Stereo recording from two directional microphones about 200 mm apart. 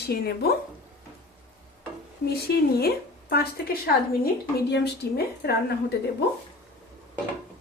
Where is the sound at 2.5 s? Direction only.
55° left (ahead or behind).